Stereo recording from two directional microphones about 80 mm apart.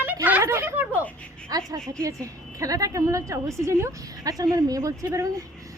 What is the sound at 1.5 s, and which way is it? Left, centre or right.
A woman's voice, right.